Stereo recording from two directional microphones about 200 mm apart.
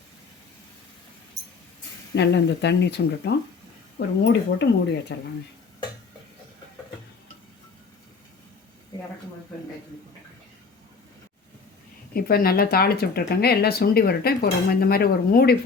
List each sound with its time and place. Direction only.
2.1 s speech: 60° left (ahead or behind)
12.1 s speech: 50° left (ahead or behind)